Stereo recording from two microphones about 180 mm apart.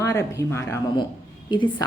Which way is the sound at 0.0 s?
20° left (ahead or behind).